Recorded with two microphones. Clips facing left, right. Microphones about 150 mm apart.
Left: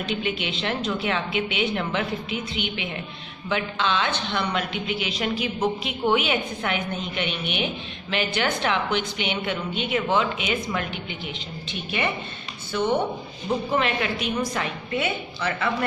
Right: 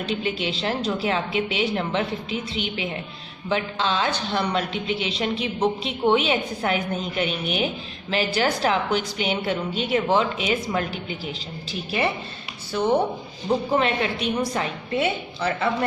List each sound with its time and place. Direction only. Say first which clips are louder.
0.0 s a woman's voice: right 1 dB; 35° right (ahead or behind)